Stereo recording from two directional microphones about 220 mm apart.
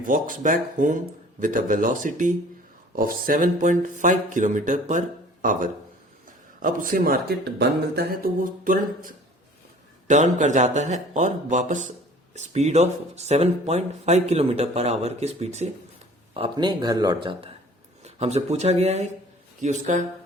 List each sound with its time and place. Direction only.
0.0 s speech: 40° right (ahead or behind)
6.6 s speech: 35° right (ahead or behind)